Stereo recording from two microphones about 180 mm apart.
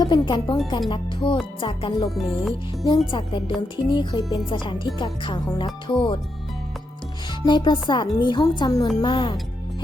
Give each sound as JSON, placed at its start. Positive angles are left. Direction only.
{"t": 0.0, "sound": "speech", "side_deg": 25}
{"t": 2.0, "sound": "speech", "side_deg": 0}
{"t": 2.8, "sound": "speech", "side_deg": 25}
{"t": 7.4, "sound": "speech", "side_deg": 25}